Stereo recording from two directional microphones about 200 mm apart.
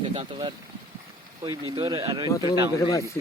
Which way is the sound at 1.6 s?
25° right (ahead or behind).